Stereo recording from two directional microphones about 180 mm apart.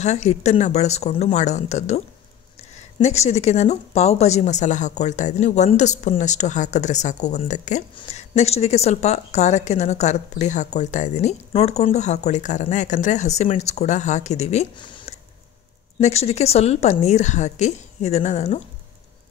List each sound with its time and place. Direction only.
0.0 s speech: 40° left (ahead or behind)